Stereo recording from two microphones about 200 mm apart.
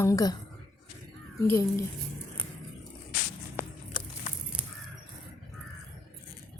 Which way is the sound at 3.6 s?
10° right (ahead or behind).